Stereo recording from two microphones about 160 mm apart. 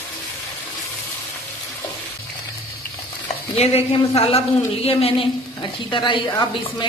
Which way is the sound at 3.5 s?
40° left (ahead or behind).